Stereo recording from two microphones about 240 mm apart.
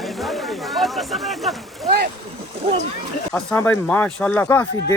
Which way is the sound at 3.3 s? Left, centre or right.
Centre.